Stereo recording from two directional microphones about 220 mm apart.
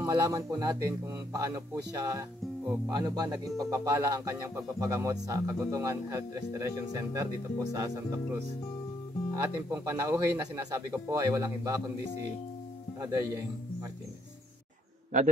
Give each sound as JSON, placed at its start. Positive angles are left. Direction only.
{"t": 0.0, "sound": "speech", "side_deg": -15}
{"t": 13.0, "sound": "speech", "side_deg": -15}